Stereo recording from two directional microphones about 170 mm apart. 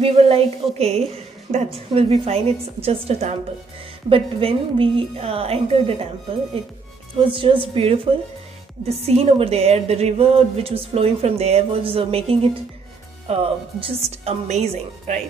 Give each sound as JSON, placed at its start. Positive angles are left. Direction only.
{"t": 0.0, "sound": "a woman's voice", "side_deg": -35}
{"t": 7.2, "sound": "a woman's voice", "side_deg": -30}